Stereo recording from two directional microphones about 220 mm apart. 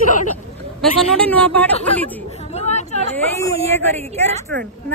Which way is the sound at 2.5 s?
30° left (ahead or behind).